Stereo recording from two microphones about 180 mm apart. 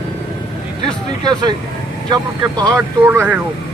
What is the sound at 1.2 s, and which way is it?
Speech, 25° right (ahead or behind).